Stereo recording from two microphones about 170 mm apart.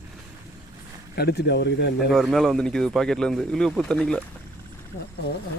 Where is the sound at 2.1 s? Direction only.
Centre (ahead or behind).